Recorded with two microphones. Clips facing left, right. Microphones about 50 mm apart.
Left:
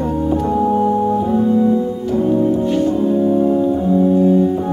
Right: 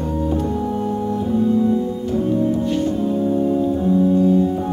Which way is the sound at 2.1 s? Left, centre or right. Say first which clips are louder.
Left 4 dB; left.